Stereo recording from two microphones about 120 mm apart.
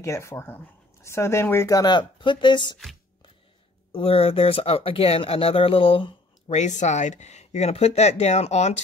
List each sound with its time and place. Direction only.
0.0 s speech: 25° left (ahead or behind); by 2.7 s 40° left (ahead or behind)
3.9 s speech: 50° left (ahead or behind)
6.5 s speech: 85° left; by 8.8 s 70° left (ahead or behind)